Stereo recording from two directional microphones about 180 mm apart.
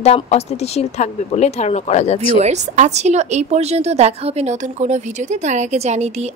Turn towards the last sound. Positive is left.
turn(degrees=-35)  # may be behind; listen again after turning